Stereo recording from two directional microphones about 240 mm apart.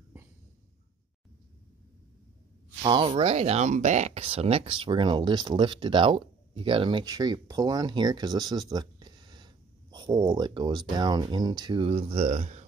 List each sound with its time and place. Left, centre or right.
2.8 s speech: right